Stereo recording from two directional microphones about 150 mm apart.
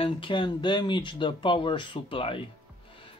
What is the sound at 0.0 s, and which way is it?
Speech, 35° left (ahead or behind).